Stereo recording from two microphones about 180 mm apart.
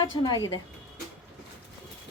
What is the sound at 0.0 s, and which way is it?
Speech, 25° left (ahead or behind).